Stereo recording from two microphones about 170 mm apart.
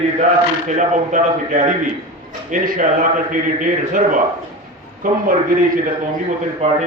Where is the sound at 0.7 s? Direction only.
45° right (ahead or behind).